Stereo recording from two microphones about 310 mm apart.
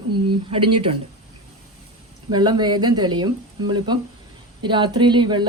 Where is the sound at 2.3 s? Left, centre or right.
Centre.